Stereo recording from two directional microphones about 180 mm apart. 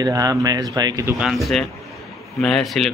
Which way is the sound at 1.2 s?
Centre (ahead or behind).